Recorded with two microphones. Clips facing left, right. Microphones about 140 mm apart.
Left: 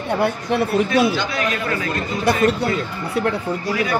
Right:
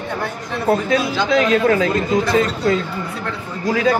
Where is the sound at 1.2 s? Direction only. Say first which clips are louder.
Right 8 dB; 90° right.